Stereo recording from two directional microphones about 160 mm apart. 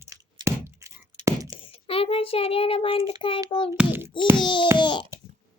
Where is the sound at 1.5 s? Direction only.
35° left (ahead or behind).